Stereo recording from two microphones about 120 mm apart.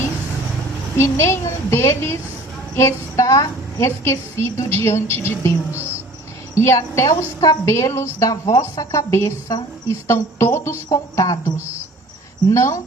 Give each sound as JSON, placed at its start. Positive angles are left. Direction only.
{"t": 0.9, "sound": "a woman's voice", "side_deg": 20}